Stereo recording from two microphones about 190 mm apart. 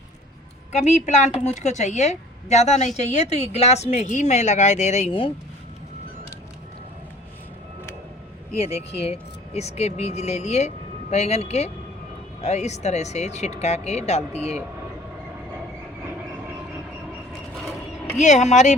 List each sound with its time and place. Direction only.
0.7 s a woman's voice: 35° left (ahead or behind)
8.5 s a woman's voice: 30° left (ahead or behind)
18.2 s a woman's voice: 40° left (ahead or behind)